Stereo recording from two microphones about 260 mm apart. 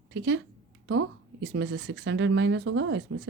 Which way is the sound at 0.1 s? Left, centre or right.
Right.